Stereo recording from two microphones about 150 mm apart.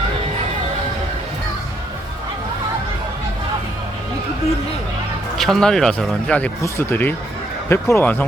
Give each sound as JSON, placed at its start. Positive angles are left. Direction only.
{"t": 5.4, "sound": "speech", "side_deg": 5}